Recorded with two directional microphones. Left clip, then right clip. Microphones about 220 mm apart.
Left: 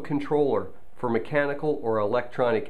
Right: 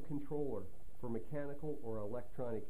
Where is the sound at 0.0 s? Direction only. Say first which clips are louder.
Left 18 dB; 10° left (ahead or behind).